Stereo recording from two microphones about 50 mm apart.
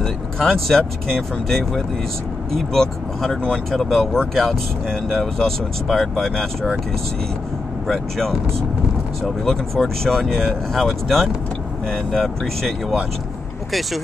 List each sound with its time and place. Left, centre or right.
0.0 s speech: centre
7.9 s speech: centre
9.4 s speech: centre